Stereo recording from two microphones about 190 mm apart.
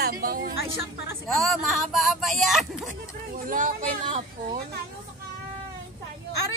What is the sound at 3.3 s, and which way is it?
Speech, 45° right (ahead or behind).